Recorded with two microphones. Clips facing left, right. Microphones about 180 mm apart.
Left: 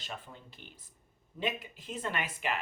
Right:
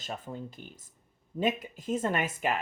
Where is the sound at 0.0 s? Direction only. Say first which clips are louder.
Right 7 dB; 45° right (ahead or behind).